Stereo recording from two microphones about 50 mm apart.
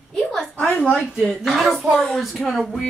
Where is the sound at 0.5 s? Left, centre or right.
Left.